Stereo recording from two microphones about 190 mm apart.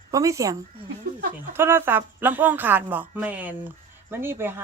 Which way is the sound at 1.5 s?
10° right (ahead or behind).